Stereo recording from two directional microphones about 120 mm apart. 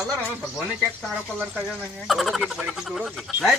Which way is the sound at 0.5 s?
Centre (ahead or behind).